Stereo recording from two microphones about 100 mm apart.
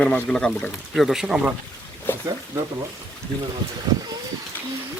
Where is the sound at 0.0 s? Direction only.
10° left (ahead or behind).